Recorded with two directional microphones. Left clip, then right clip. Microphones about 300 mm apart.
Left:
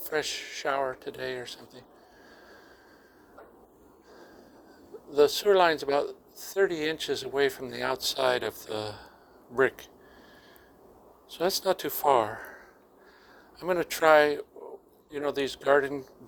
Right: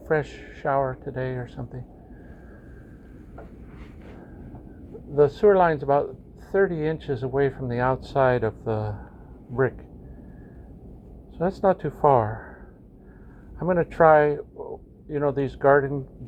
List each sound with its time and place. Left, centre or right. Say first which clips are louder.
0.1 s speech: right 5 dB; left
5.1 s speech: right 4 dB; left
11.3 s speech: right 5 dB; left
13.6 s speech: right 7 dB; left